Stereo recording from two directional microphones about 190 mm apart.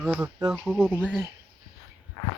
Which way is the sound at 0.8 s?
10° right (ahead or behind).